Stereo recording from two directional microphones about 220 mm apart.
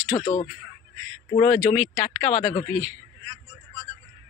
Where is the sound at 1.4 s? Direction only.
5° left (ahead or behind).